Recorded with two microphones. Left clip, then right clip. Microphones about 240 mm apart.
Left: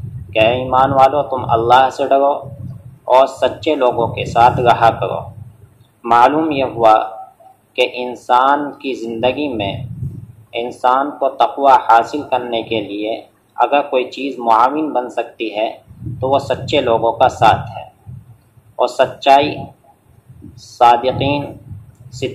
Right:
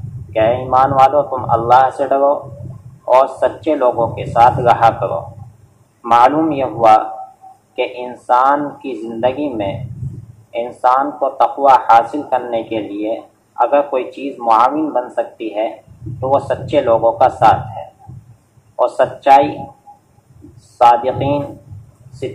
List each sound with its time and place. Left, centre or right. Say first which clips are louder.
0.3 s speech: even; left
18.8 s speech: even; left
20.7 s speech: even; left